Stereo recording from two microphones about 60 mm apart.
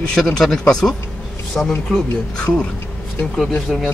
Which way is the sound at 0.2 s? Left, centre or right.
Centre.